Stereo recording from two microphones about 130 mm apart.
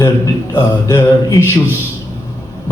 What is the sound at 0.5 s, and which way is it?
Speech, 20° left (ahead or behind).